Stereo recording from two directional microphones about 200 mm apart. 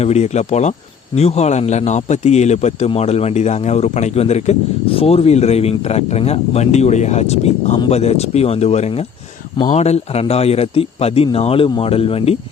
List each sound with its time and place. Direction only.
0.0 s a man's voice: 35° left (ahead or behind)